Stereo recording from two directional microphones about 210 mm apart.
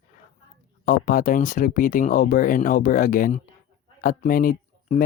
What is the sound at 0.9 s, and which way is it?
Speech, 40° left (ahead or behind).